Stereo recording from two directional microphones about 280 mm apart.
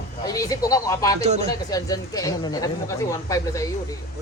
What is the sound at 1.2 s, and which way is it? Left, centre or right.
Speech, right.